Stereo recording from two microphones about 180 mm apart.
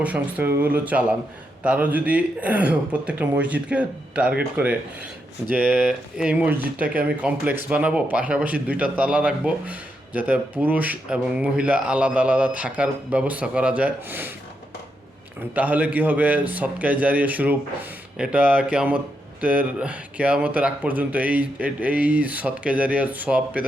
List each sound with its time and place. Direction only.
0.0 s speech: 10° right (ahead or behind)
15.5 s speech: 10° right (ahead or behind)